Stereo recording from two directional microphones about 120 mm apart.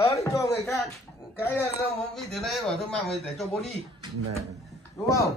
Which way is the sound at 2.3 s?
Centre (ahead or behind).